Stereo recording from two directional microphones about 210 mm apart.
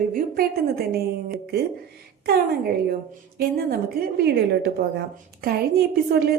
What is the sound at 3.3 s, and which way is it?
A woman's voice, 45° right (ahead or behind).